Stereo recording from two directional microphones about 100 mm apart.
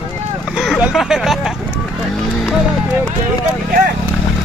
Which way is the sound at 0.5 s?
Centre (ahead or behind).